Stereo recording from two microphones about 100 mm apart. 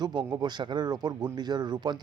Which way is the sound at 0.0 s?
45° right (ahead or behind).